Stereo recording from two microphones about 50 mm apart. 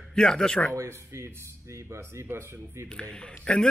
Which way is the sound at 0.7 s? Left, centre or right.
Right.